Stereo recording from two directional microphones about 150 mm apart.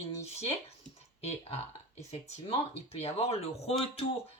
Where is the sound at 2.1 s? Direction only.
45° left (ahead or behind).